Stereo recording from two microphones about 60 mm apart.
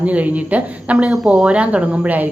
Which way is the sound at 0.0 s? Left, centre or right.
Right.